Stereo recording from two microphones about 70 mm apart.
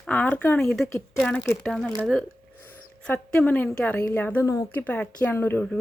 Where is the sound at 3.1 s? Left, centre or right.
Left.